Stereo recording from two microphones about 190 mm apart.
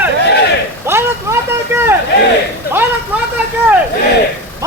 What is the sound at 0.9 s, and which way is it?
Vehicle, 15° right (ahead or behind).